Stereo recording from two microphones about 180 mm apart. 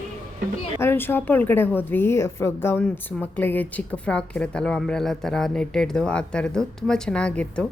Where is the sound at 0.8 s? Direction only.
10° left (ahead or behind).